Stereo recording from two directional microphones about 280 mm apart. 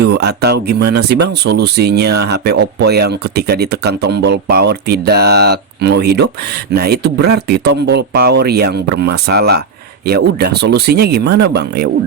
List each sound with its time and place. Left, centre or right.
0.0 s speech: right